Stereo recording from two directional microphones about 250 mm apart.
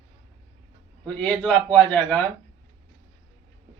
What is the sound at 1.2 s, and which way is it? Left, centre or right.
Speech, centre.